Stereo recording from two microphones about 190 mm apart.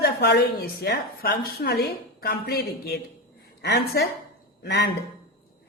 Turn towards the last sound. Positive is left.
turn(degrees=55)  # may be behind; listen again after turning